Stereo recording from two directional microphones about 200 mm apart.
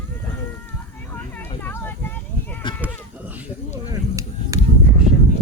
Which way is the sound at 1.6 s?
10° left (ahead or behind).